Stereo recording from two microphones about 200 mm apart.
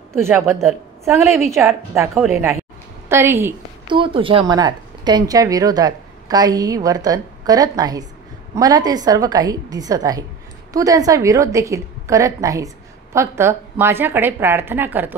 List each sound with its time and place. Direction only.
0.1 s a woman's voice: 15° right (ahead or behind)
3.9 s a woman's voice: 25° right (ahead or behind); by 15.1 s 10° right (ahead or behind)